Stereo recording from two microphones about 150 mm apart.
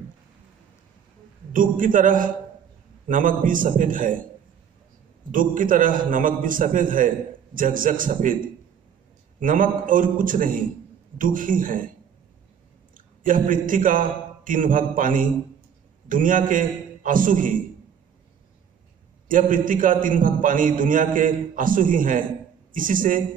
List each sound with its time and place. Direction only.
1.5 s a man's voice: 65° right (ahead or behind)
5.3 s a man's voice: 65° right (ahead or behind)
9.4 s a man's voice: 65° right (ahead or behind)
12.9 s a man's voice: 65° right (ahead or behind)
19.2 s a man's voice: 65° right (ahead or behind)